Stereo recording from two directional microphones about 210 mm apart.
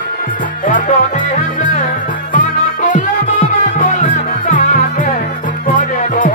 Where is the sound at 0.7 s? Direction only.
40° left (ahead or behind).